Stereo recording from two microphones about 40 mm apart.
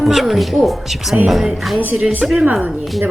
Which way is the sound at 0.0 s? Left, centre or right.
Centre.